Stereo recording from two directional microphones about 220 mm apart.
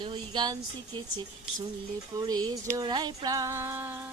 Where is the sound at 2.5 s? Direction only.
15° right (ahead or behind).